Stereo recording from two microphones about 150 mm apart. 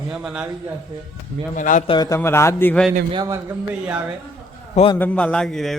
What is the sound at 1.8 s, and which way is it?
Speech, 25° left (ahead or behind).